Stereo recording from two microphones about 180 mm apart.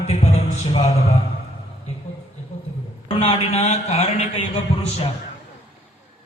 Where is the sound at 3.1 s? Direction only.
30° left (ahead or behind).